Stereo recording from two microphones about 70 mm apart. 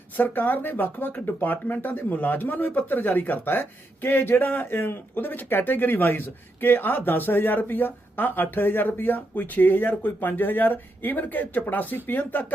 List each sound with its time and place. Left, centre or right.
0.2 s speech: left